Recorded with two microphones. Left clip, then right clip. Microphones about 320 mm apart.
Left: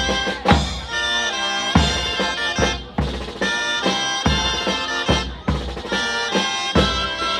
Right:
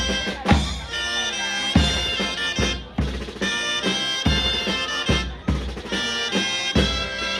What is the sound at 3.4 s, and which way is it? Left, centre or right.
Music, centre.